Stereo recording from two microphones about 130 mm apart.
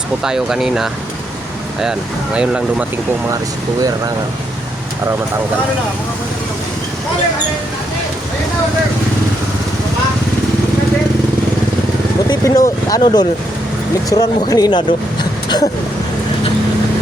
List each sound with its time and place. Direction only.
0.2 s speech: 5° right (ahead or behind)
12.3 s speech: 30° left (ahead or behind)